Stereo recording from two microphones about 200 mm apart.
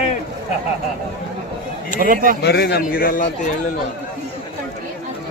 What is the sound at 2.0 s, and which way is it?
Speech, 45° right (ahead or behind).